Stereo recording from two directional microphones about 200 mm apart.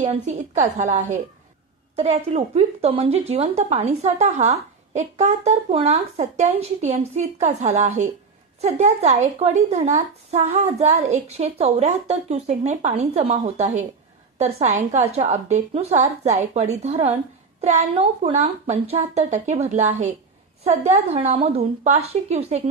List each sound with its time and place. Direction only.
0.0 s speech: 35° right (ahead or behind)